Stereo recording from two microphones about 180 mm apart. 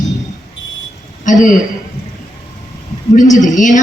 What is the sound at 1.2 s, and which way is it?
Speech, 45° left (ahead or behind).